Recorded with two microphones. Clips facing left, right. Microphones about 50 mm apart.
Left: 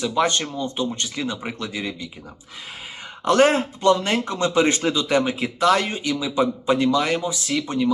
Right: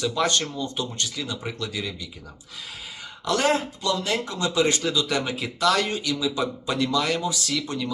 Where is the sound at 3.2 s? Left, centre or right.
Left.